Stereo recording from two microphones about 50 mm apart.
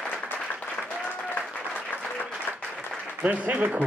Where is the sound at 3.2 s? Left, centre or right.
Right.